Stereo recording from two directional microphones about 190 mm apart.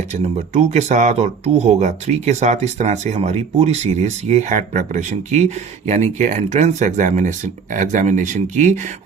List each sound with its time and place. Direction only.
0.1 s speech: 35° right (ahead or behind)